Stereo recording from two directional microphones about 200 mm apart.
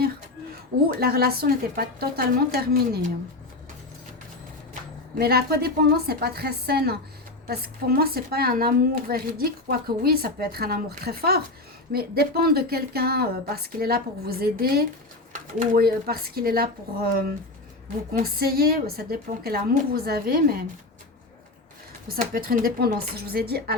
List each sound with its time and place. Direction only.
0.9 s a woman's voice: 50° right (ahead or behind)
4.7 s a woman's voice: 45° right (ahead or behind)
18.1 s a woman's voice: 50° right (ahead or behind)
22.1 s a woman's voice: 45° right (ahead or behind)